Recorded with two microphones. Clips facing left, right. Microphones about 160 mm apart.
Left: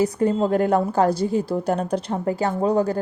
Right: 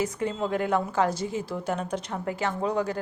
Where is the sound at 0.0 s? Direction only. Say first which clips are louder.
Left 8 dB; 35° left (ahead or behind).